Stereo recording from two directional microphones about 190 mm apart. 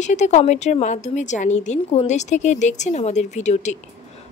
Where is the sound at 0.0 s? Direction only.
40° left (ahead or behind).